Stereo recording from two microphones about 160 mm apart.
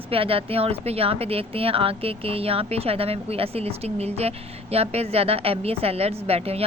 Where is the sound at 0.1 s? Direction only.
35° right (ahead or behind).